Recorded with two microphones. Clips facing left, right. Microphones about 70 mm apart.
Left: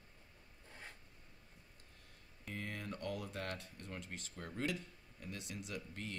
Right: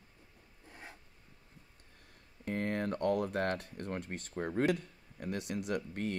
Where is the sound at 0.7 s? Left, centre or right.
Centre.